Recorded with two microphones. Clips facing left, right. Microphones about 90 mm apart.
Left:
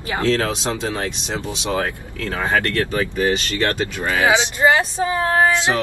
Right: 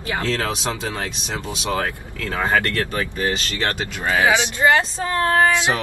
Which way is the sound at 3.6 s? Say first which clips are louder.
Left 3 dB; 20° right (ahead or behind).